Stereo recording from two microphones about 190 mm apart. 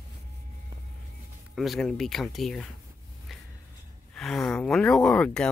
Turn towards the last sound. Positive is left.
turn(degrees=5)  # may be behind; listen again after turning